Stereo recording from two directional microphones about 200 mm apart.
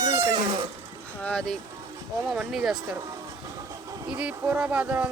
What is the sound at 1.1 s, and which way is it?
Speech, 5° left (ahead or behind).